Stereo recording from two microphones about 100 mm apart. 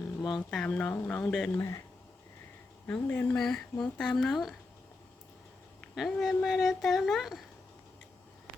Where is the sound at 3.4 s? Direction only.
5° left (ahead or behind).